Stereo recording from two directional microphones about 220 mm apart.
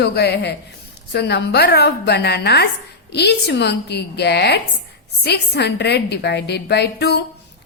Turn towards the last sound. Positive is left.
turn(degrees=50)  # may be behind; listen again after turning